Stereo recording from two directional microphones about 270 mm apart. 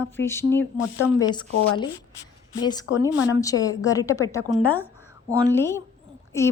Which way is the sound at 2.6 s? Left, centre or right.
Centre.